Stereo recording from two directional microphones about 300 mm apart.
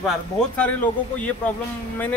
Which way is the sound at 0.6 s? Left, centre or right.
Centre.